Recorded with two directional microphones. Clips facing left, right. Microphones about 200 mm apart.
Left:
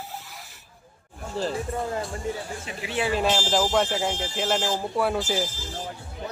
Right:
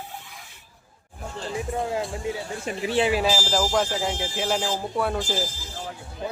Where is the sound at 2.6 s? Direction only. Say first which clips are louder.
Right 7 dB; 40° right (ahead or behind).